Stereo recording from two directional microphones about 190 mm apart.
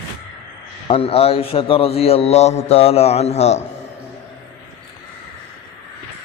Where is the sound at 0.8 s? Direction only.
30° left (ahead or behind).